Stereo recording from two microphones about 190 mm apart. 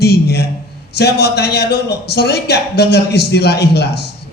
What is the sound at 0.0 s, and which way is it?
A man's voice, 60° left (ahead or behind).